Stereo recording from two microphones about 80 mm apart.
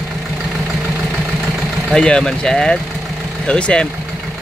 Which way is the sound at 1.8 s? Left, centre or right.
Centre.